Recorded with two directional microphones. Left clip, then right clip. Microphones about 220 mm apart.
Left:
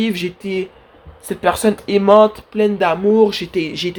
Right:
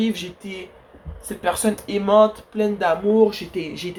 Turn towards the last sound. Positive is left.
turn(degrees=40)  # may be behind; listen again after turning